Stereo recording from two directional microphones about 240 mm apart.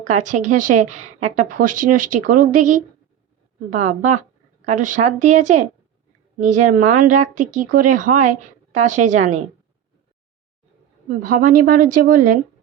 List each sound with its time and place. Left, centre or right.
0.1 s a woman's voice: right
11.1 s a woman's voice: right